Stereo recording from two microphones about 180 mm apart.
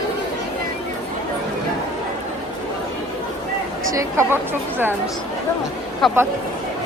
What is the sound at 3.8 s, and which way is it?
Speech, 15° right (ahead or behind).